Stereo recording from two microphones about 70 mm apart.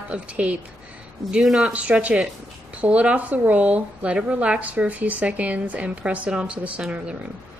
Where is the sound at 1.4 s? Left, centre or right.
Centre.